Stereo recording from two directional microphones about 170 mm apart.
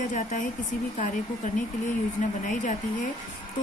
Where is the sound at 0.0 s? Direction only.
45° left (ahead or behind).